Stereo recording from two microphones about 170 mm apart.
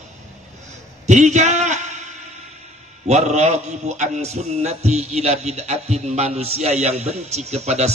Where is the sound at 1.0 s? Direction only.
45° right (ahead or behind).